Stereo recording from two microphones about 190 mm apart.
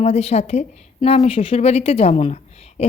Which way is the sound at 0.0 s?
35° left (ahead or behind).